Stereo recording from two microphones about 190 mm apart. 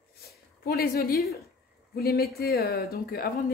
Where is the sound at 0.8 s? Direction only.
55° left (ahead or behind).